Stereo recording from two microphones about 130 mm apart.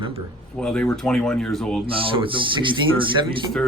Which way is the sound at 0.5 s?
5° left (ahead or behind).